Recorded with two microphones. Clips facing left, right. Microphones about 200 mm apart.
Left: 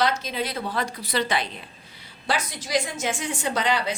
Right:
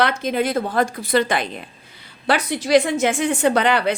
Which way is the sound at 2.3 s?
65° right (ahead or behind).